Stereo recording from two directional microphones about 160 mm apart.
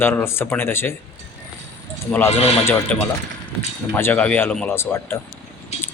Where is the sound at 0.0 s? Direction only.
15° left (ahead or behind).